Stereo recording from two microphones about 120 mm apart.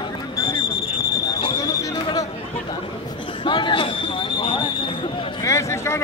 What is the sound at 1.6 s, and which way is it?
Basketball bounce, 30° left (ahead or behind).